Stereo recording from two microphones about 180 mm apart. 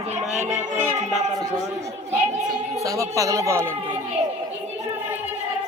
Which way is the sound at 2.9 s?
20° right (ahead or behind).